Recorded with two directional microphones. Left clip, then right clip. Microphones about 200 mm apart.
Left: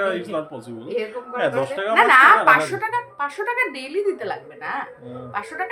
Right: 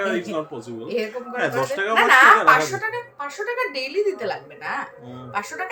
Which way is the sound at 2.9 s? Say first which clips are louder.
Left 5 dB; 60° left (ahead or behind).